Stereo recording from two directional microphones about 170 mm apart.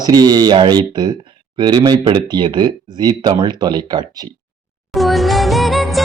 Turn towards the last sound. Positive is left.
turn(degrees=0)  # may be behind; listen again after turning